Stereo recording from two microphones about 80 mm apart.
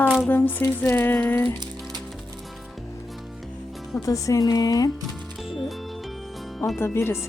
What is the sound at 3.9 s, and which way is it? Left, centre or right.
Speech, left.